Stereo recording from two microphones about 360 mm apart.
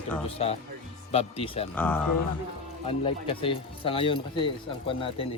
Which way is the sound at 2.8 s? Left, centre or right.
Centre.